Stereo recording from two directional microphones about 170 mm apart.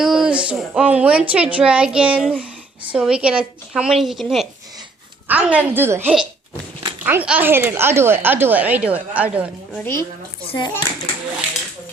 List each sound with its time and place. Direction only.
0.0 s a woman's voice: 5° right (ahead or behind)
9.7 s a woman's voice: 15° left (ahead or behind)
10.6 s a child's voice: 25° left (ahead or behind)